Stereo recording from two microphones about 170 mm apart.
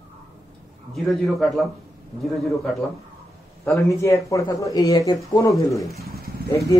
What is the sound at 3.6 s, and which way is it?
Speech, 15° left (ahead or behind).